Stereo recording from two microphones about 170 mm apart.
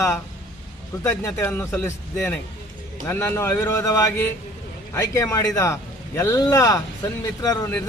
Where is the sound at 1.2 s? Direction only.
15° left (ahead or behind).